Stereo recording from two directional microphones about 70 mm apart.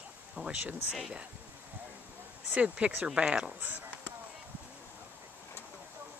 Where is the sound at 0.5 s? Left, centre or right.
Centre.